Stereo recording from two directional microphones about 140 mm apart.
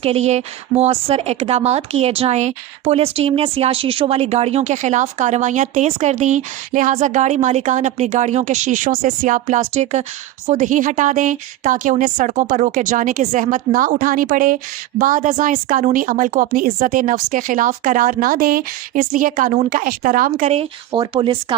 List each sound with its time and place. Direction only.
0.0 s speech: 50° right (ahead or behind)
20.9 s speech: 35° right (ahead or behind)